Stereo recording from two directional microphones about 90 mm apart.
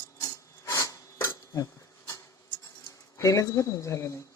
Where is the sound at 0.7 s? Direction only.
40° left (ahead or behind).